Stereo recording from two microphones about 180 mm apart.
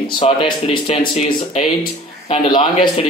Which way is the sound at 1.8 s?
25° left (ahead or behind).